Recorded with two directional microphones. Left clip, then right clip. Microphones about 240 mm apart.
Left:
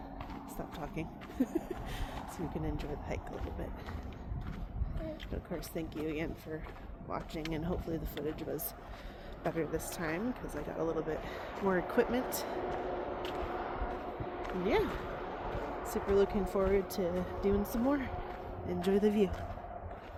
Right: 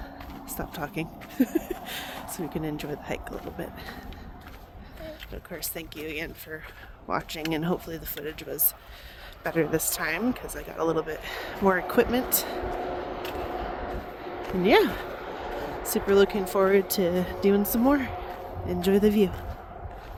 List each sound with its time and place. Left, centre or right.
0.5 s speech: right
5.5 s speech: right
13.2 s a sound: right
15.9 s speech: right